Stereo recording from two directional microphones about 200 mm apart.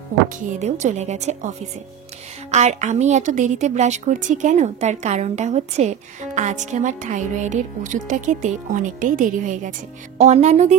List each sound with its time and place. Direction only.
0.5 s a woman's voice: 35° right (ahead or behind)
2.5 s a woman's voice: 35° right (ahead or behind)